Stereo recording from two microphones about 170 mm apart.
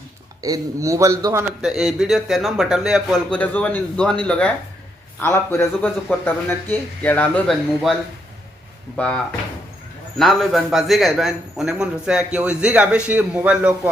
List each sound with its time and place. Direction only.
0.4 s a man's voice: 20° right (ahead or behind)
1.6 s a man's voice: centre (ahead or behind)
9.0 s a man's voice: 5° left (ahead or behind)